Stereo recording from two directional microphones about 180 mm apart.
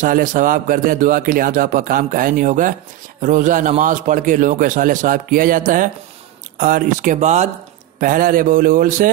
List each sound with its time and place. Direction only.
0.0 s a man's voice: 50° right (ahead or behind)